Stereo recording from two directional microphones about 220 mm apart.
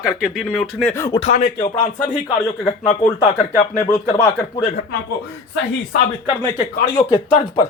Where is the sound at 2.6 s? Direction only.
20° left (ahead or behind).